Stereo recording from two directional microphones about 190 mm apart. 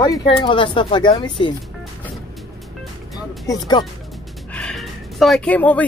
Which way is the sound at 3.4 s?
20° left (ahead or behind).